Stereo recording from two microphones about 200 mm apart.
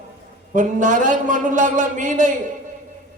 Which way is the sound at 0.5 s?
40° right (ahead or behind).